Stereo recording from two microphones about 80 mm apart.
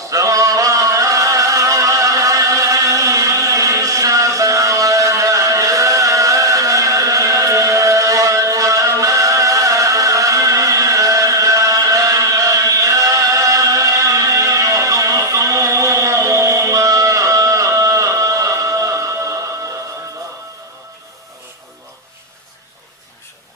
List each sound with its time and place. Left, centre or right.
0.1 s chant: right